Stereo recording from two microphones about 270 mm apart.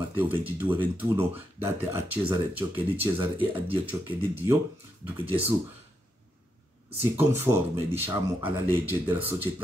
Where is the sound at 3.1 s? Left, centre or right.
Centre.